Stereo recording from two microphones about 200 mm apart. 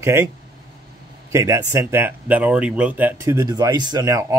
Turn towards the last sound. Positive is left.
turn(degrees=-20)  # may be behind; listen again after turning